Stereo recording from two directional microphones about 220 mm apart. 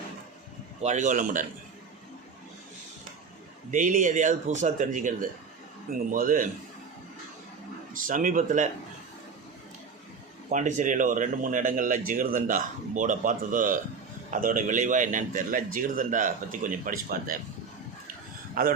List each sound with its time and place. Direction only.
0.8 s speech: 35° right (ahead or behind)
3.7 s speech: 35° right (ahead or behind)
7.9 s speech: 35° right (ahead or behind)
10.5 s speech: 35° right (ahead or behind)
18.6 s speech: 40° right (ahead or behind)